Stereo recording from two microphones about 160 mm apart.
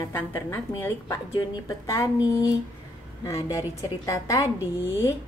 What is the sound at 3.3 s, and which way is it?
A woman's voice, 20° left (ahead or behind).